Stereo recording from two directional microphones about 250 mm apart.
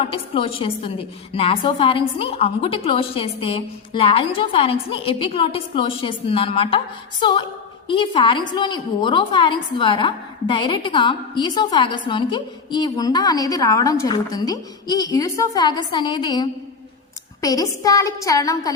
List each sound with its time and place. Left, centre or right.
0.0 s a woman's voice: left